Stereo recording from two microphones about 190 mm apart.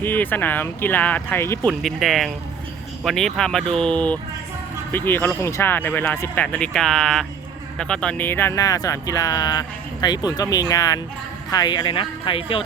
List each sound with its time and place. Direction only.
0.0 s speech: 10° left (ahead or behind)
1.8 s speech: centre (ahead or behind); by 12.6 s 25° left (ahead or behind)